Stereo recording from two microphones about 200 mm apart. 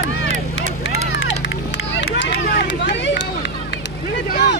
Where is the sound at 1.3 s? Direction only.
60° left (ahead or behind).